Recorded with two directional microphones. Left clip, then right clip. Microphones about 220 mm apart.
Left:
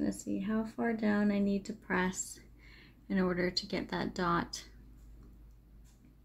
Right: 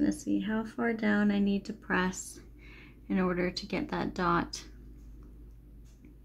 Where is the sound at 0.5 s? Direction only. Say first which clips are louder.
Right 3 dB; 15° right (ahead or behind).